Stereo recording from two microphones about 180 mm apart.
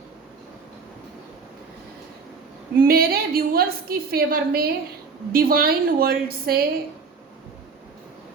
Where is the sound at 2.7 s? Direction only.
55° right (ahead or behind).